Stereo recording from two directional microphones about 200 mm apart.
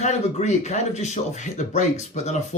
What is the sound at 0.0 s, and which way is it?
Speech, 35° left (ahead or behind).